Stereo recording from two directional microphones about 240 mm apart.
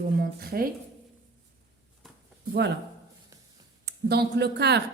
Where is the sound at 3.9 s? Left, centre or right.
Right.